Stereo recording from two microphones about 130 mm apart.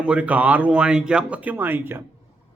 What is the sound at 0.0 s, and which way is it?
A man's voice, 10° right (ahead or behind).